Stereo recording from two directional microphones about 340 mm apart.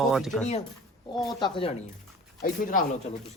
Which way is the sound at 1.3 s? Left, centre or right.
Centre.